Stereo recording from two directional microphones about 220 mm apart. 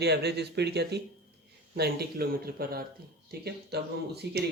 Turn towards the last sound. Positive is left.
turn(degrees=-50)  # may be behind; listen again after turning